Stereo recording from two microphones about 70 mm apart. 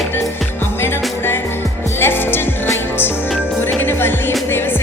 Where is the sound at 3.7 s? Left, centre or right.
Left.